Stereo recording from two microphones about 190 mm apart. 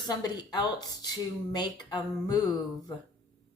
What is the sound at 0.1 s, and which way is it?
A woman's voice, 20° left (ahead or behind).